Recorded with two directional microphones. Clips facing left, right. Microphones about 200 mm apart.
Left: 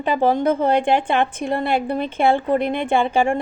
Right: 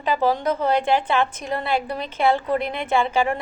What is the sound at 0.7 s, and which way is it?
A woman's voice, 55° left (ahead or behind).